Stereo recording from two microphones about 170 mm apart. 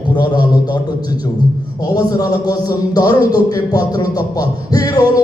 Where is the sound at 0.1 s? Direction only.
25° left (ahead or behind).